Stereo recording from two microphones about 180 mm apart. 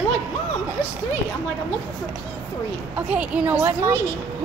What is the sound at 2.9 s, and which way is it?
A woman's voice, 10° right (ahead or behind).